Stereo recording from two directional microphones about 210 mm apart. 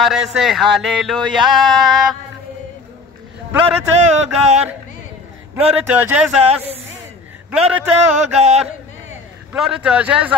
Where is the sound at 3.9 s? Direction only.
35° right (ahead or behind).